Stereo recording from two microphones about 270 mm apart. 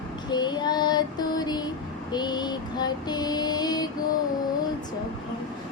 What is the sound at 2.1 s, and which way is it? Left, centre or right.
Female singing, centre.